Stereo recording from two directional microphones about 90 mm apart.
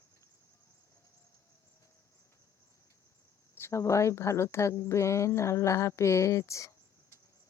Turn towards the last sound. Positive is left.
turn(degrees=35)  # may be behind; listen again after turning